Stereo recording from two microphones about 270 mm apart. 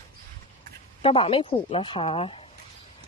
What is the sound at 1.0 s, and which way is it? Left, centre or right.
A man's voice, centre.